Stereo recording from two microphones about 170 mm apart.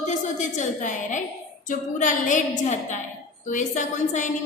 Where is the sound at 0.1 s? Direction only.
45° left (ahead or behind).